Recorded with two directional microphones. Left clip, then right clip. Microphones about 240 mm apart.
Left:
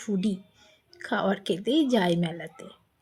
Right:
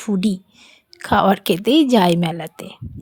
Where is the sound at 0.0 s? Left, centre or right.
Right.